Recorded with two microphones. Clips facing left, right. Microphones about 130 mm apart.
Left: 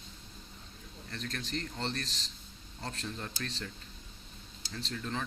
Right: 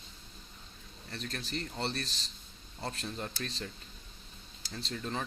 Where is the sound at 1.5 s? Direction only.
10° right (ahead or behind).